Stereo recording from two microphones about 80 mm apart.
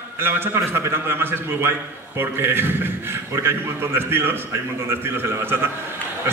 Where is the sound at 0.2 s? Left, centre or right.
Right.